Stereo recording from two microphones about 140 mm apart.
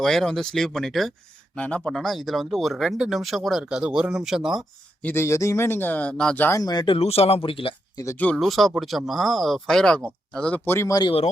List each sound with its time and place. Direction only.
0.0 s speech: centre (ahead or behind)
5.0 s speech: 20° left (ahead or behind)
6.6 s speech: 30° left (ahead or behind)
8.1 s speech: 10° left (ahead or behind)